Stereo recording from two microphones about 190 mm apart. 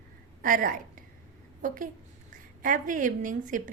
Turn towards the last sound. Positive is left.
turn(degrees=-45)  # may be behind; listen again after turning